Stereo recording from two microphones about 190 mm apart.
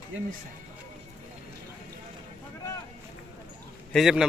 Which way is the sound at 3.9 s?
Centre (ahead or behind).